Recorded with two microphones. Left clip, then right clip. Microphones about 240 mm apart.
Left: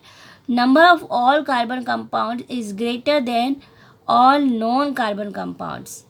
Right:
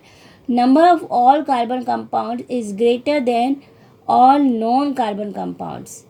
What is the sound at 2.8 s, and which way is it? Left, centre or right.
Speech, left.